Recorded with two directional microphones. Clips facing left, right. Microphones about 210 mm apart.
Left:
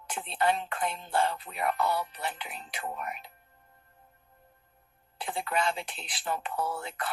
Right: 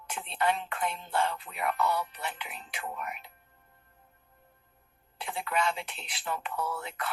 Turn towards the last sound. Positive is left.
turn(degrees=35)  # may be behind; listen again after turning